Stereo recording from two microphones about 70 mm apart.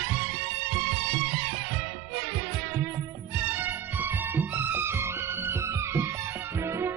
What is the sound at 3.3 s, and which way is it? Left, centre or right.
Music, right.